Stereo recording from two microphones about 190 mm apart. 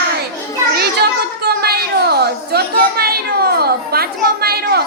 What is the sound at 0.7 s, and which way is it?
Children playing, 55° right (ahead or behind).